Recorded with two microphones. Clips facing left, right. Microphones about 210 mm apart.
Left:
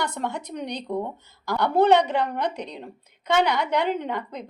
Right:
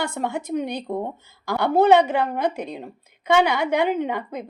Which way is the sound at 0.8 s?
50° right (ahead or behind).